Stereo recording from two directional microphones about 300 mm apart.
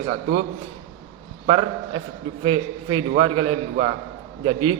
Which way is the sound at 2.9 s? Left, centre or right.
Centre.